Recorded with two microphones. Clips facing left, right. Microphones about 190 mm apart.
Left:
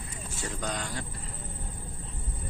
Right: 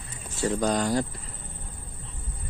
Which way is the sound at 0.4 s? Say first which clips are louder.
Right 11 dB; 35° right (ahead or behind).